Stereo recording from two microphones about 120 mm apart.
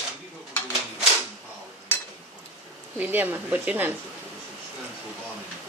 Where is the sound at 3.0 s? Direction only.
15° right (ahead or behind).